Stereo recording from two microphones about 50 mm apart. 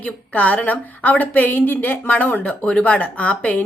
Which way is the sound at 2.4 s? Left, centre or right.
Left.